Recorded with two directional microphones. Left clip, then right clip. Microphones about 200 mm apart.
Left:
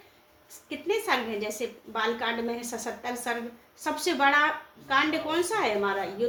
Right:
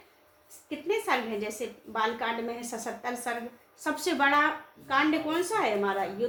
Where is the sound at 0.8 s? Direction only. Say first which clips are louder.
Left 1 dB; 10° right (ahead or behind).